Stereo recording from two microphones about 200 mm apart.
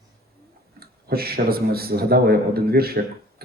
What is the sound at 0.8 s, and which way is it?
A man's voice, 50° right (ahead or behind).